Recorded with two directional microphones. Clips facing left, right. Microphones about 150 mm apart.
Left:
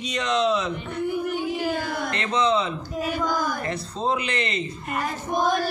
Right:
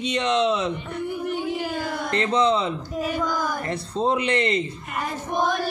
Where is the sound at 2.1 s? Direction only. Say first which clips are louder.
Right 3 dB; 30° right (ahead or behind).